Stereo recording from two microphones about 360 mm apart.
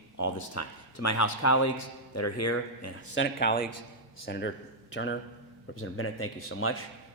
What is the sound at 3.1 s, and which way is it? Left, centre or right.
A man's voice, left.